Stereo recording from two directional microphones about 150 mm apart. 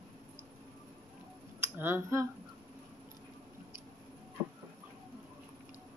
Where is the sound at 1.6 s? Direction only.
15° right (ahead or behind).